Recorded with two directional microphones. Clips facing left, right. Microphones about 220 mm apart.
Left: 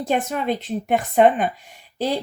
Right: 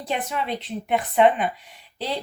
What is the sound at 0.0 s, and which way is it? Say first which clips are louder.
Speech: left 5 dB; 45° left (ahead or behind).